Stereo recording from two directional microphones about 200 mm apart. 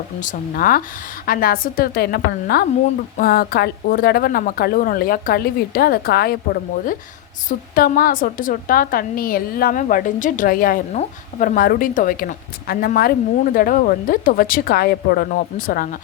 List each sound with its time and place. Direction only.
0.2 s a woman's voice: 40° left (ahead or behind)